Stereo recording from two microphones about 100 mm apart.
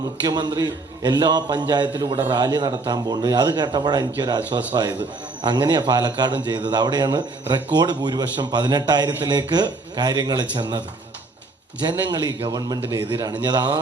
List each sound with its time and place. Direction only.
0.3 s a man's voice: 40° right (ahead or behind)
11.9 s a man's voice: 40° right (ahead or behind)